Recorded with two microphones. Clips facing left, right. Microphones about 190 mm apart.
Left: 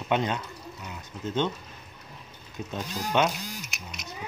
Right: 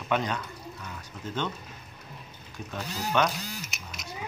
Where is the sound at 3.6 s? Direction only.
Centre (ahead or behind).